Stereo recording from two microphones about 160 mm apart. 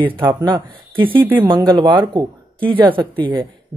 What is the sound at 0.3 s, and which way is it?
Speech, 25° right (ahead or behind).